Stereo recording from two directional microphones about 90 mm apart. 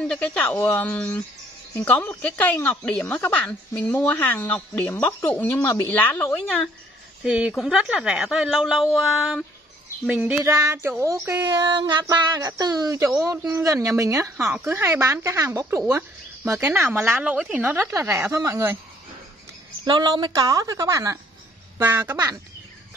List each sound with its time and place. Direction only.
0.0 s speech: 10° left (ahead or behind)
7.2 s a woman's voice: 10° right (ahead or behind)
10.0 s speech: 15° right (ahead or behind)
10.4 s a sound: 35° right (ahead or behind)
11.4 s speech: 55° right (ahead or behind); by 13.4 s 35° right (ahead or behind)
13.6 s a sound: 35° right (ahead or behind)
14.6 s speech: 25° right (ahead or behind)
15.1 s a sound: 35° right (ahead or behind)
16.4 s speech: 30° right (ahead or behind)
19.8 s speech: 55° right (ahead or behind); by 21.2 s 40° right (ahead or behind)
21.8 s speech: 25° right (ahead or behind)